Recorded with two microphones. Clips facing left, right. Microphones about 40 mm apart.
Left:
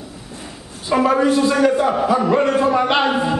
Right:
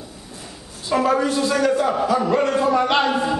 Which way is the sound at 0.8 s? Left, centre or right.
Centre.